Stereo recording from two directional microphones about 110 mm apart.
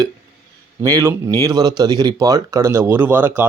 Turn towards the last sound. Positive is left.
turn(degrees=-20)  # may be behind; listen again after turning